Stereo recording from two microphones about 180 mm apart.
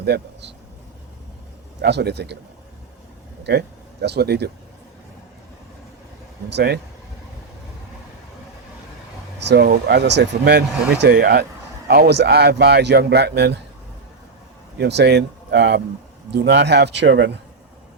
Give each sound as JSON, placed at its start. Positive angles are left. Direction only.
{"t": 0.0, "sound": "speech", "side_deg": -65}
{"t": 1.8, "sound": "speech", "side_deg": -70}
{"t": 4.0, "sound": "speech", "side_deg": -65}
{"t": 6.5, "sound": "speech", "side_deg": -70}
{"t": 9.4, "sound": "speech", "side_deg": -65}
{"t": 14.8, "sound": "speech", "side_deg": -70}
{"t": 16.3, "sound": "speech", "side_deg": -70}